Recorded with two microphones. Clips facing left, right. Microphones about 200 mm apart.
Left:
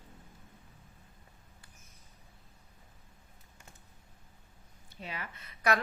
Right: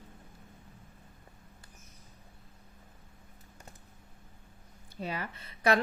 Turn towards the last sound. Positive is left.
turn(degrees=-30)  # may be behind; listen again after turning